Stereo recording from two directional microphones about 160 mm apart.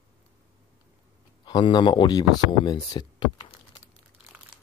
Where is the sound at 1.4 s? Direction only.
30° left (ahead or behind).